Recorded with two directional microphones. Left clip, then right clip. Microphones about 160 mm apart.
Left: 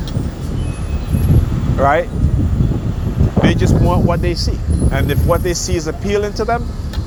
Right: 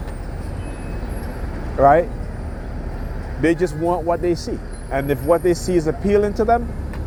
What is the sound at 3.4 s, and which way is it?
Speech, 30° right (ahead or behind).